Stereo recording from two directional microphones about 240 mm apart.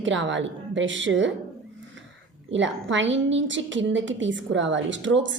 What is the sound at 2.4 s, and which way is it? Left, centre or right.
A woman's voice, right.